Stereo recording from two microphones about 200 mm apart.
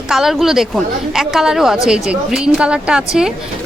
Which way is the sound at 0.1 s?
Centre (ahead or behind).